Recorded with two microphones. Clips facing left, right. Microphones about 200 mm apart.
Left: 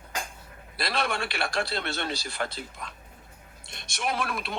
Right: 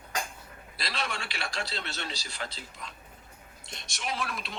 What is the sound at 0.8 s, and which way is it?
Speech, 55° left (ahead or behind).